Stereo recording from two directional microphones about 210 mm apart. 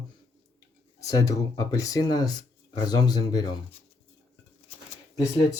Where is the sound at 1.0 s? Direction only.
15° left (ahead or behind).